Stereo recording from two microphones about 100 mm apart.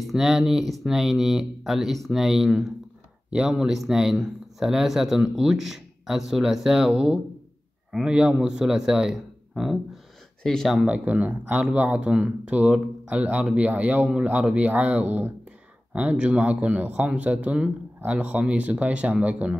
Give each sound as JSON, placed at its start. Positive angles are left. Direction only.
{"t": 0.0, "sound": "speech", "side_deg": -5}
{"t": 10.4, "sound": "speech", "side_deg": 5}
{"t": 10.9, "sound": "speech", "side_deg": -15}